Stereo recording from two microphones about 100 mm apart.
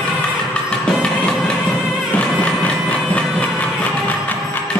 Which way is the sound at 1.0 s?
10° left (ahead or behind).